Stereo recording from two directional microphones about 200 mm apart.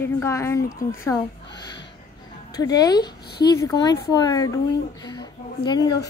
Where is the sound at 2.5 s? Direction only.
20° left (ahead or behind).